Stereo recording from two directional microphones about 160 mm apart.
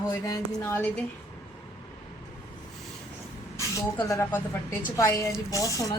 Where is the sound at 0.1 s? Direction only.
20° left (ahead or behind).